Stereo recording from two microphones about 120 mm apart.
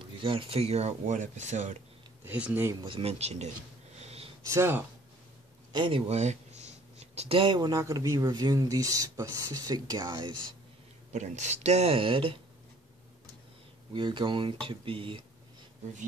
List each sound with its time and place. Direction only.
0.0 s speech: 45° right (ahead or behind); by 1.8 s 75° right (ahead or behind)
2.2 s speech: 15° right (ahead or behind)
2.8 s speech: 50° right (ahead or behind)
4.0 s a sound: 60° right (ahead or behind)
4.5 s speech: 20° right (ahead or behind)
5.7 s speech: 45° right (ahead or behind)
11.1 s speech: 80° right; by 12.4 s 50° right (ahead or behind)
13.9 s speech: 45° right (ahead or behind)